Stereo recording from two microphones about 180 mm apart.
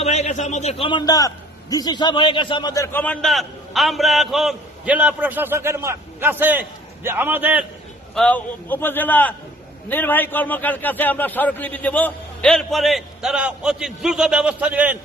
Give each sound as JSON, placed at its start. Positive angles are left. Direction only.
{"t": 0.0, "sound": "a man's voice", "side_deg": 35}
{"t": 8.1, "sound": "a man's voice", "side_deg": 5}